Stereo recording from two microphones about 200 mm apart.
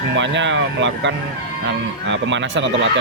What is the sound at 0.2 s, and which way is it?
Speech, 65° right (ahead or behind).